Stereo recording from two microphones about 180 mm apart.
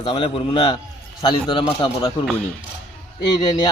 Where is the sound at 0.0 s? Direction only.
25° left (ahead or behind).